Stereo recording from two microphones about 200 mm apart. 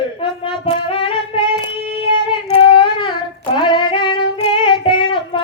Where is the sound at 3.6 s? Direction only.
25° left (ahead or behind).